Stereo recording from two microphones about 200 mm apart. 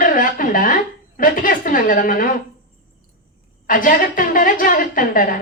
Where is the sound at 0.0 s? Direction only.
45° left (ahead or behind).